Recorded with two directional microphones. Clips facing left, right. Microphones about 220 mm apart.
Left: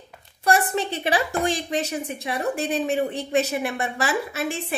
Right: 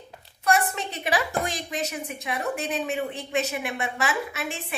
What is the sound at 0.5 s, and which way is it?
A woman's voice, 30° left (ahead or behind).